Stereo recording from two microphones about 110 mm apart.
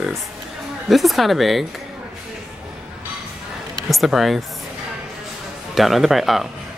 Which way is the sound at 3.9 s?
Centre (ahead or behind).